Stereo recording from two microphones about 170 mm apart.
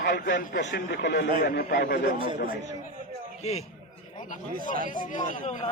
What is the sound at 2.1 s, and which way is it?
Speech, 30° right (ahead or behind).